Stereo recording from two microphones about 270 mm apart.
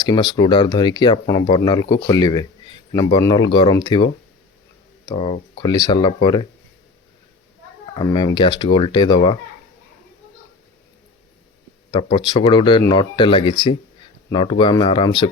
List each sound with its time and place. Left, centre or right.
0.0 s speech: centre
7.9 s speech: centre
11.9 s speech: centre